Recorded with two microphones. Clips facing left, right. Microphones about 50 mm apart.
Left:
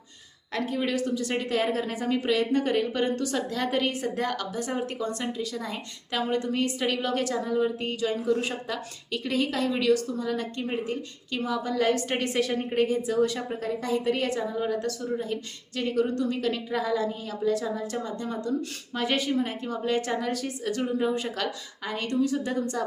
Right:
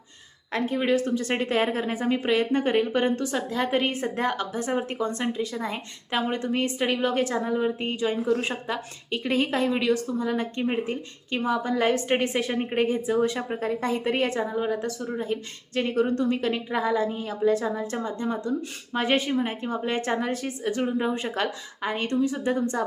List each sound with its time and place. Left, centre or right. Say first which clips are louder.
0.5 s a woman's voice: right 4 dB; right
14.6 s a woman's voice: right 1 dB; centre